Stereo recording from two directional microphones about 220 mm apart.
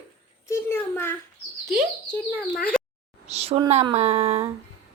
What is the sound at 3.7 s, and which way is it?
Speech, 30° right (ahead or behind).